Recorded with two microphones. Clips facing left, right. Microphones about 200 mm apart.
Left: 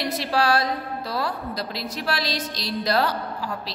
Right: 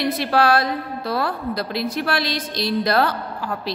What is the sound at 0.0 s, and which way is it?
A woman's voice, 55° right (ahead or behind).